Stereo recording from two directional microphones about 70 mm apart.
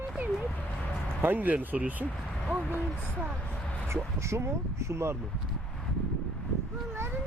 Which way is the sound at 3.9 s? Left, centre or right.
Right.